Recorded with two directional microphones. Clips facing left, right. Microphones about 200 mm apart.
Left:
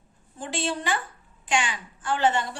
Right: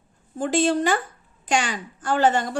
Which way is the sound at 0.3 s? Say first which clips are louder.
Right 9 dB; 45° right (ahead or behind).